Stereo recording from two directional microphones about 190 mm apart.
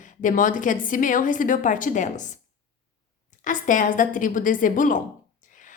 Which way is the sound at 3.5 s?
45° left (ahead or behind).